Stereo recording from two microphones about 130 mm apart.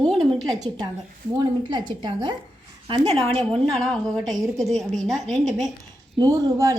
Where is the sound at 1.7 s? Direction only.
40° right (ahead or behind).